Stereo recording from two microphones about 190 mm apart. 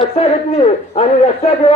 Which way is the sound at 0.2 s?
30° left (ahead or behind).